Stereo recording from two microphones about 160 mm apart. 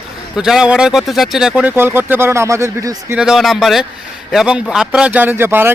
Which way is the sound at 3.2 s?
Centre (ahead or behind).